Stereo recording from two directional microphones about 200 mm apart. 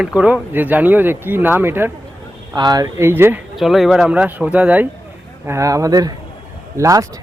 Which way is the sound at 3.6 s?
Centre (ahead or behind).